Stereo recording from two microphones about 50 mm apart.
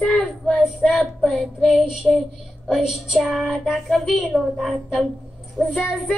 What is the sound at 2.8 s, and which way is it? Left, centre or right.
Speech, centre.